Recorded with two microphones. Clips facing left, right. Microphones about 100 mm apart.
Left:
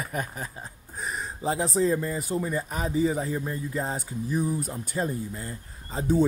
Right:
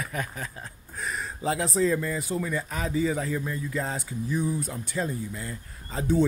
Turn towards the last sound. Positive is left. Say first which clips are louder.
# left 1 dB
turn(degrees=30)  # may be behind; listen again after turning